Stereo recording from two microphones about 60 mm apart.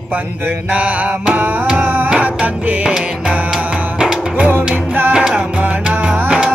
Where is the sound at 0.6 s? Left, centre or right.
Right.